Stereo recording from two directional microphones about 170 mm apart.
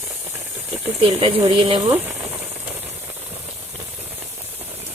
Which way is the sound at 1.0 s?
35° right (ahead or behind).